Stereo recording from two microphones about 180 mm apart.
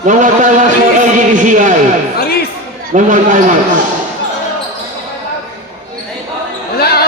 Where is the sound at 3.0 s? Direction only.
45° right (ahead or behind).